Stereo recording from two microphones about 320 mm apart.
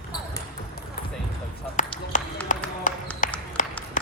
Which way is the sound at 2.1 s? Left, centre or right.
Left.